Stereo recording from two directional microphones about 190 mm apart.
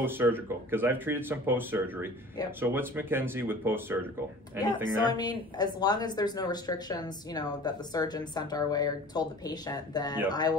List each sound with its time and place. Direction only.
0.0 s speech: 10° right (ahead or behind)
4.8 s speech: 20° left (ahead or behind)